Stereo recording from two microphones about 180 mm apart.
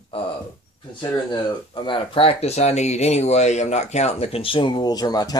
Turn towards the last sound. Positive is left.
turn(degrees=20)  # may be behind; listen again after turning